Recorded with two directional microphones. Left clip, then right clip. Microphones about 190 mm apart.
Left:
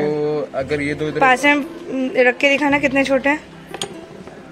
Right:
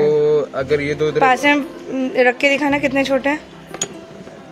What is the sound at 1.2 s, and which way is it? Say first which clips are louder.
A woman's voice: left 1 dB; 5° left (ahead or behind).